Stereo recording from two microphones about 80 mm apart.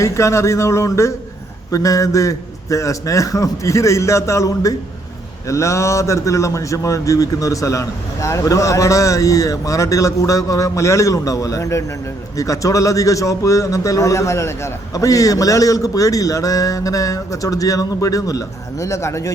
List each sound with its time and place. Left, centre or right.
0.0 s a man's voice: left